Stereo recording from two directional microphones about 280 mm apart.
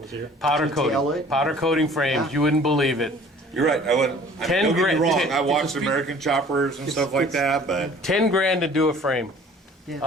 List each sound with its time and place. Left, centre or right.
0.4 s a man's voice: centre